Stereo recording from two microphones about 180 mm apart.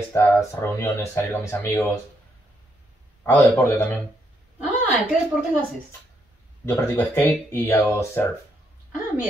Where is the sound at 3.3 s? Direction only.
10° left (ahead or behind).